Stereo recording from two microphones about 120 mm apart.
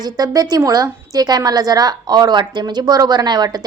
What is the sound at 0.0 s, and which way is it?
A woman's voice, 30° right (ahead or behind).